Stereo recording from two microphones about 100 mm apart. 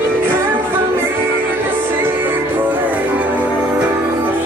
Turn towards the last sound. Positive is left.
turn(degrees=-15)  # may be behind; listen again after turning